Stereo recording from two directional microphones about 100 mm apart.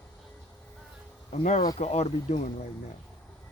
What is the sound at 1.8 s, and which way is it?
Speech, 90° left.